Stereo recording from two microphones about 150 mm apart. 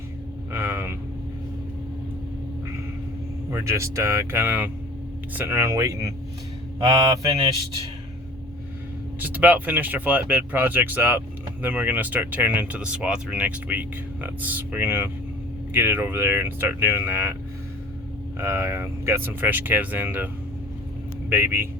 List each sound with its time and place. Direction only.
0.5 s a sound: 15° right (ahead or behind)
3.5 s speech: 20° right (ahead or behind)
9.2 s speech: 10° right (ahead or behind)
18.3 s a man's voice: 20° right (ahead or behind)